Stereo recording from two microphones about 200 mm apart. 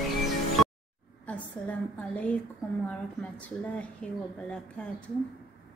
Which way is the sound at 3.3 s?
5° left (ahead or behind).